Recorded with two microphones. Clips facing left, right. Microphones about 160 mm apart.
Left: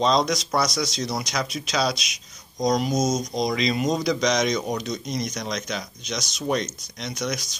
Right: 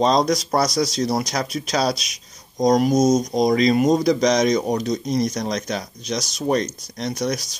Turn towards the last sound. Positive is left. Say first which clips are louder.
# right 5 dB
turn(degrees=-35)  # may be behind; listen again after turning